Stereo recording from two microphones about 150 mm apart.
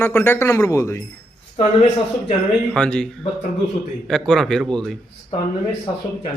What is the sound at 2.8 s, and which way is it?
Speech, 5° left (ahead or behind).